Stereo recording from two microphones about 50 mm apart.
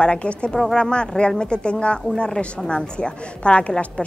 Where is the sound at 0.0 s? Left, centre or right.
Left.